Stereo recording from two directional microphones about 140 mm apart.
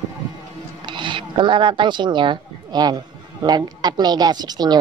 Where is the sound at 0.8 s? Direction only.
35° right (ahead or behind).